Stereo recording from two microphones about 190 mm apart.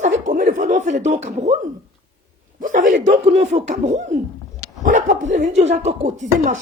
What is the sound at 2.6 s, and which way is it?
A woman's voice, 45° right (ahead or behind).